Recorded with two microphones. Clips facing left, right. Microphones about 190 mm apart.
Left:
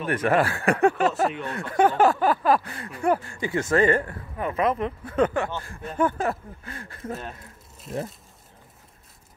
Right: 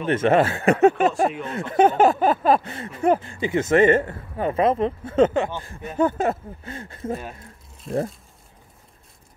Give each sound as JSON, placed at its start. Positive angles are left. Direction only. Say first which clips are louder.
{"t": 0.0, "sound": "speech", "louder": "right 4 dB", "side_deg": -25}
{"t": 7.9, "sound": "speech", "louder": "right 6 dB", "side_deg": 0}